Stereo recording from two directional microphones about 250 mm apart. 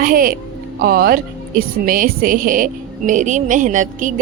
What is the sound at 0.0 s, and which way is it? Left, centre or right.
Music, right.